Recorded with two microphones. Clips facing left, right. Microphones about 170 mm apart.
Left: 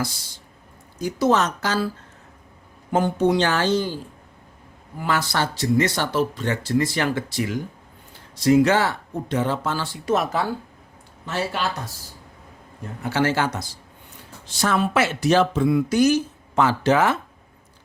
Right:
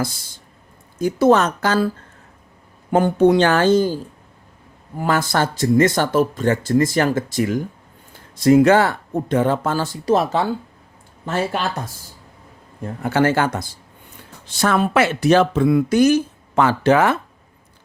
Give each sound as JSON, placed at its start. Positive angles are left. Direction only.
{"t": 0.9, "sound": "speech", "side_deg": -55}
{"t": 2.9, "sound": "speech", "side_deg": -55}
{"t": 11.3, "sound": "speech", "side_deg": -50}
{"t": 13.0, "sound": "speech", "side_deg": -55}